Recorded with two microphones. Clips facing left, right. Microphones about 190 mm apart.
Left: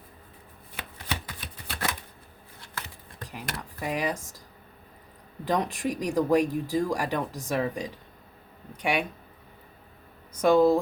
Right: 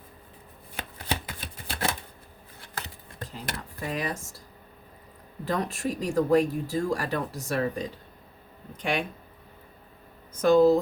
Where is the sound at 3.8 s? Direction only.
15° left (ahead or behind).